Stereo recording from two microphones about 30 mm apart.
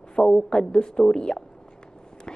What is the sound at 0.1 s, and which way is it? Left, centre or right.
A woman's voice, left.